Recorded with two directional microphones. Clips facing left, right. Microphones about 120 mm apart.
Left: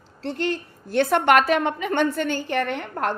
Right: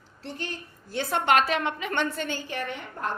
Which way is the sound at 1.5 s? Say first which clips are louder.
Left 6 dB; 45° left (ahead or behind).